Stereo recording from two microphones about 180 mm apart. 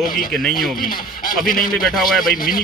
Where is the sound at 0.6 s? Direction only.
50° left (ahead or behind).